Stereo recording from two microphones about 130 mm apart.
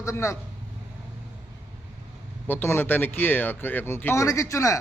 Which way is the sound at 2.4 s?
15° left (ahead or behind).